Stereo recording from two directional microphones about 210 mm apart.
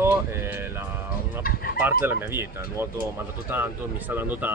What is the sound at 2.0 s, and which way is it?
Speech, 10° right (ahead or behind).